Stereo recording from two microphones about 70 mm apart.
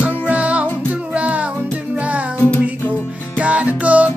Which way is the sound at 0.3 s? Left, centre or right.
Centre.